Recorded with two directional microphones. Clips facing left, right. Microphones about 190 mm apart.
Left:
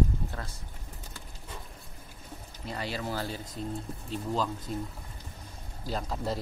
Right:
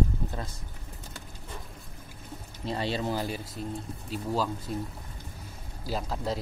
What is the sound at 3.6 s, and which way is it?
Speech, 30° left (ahead or behind).